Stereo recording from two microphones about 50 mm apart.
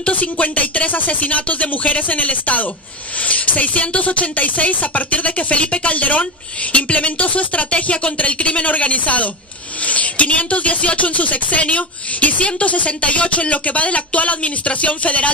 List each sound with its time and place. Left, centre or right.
0.1 s speech: left